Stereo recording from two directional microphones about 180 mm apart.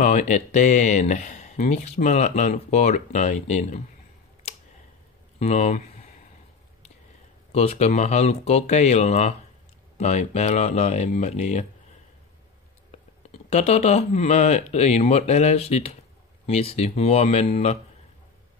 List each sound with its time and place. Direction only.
0.0 s speech: 40° left (ahead or behind)
5.4 s speech: 40° left (ahead or behind)
7.5 s speech: 35° left (ahead or behind)
13.3 s speech: 35° left (ahead or behind)